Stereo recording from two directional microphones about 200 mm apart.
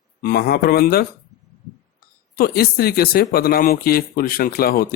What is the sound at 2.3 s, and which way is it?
Speech, 50° left (ahead or behind).